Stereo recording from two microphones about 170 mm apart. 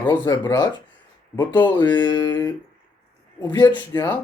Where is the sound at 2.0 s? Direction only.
15° left (ahead or behind).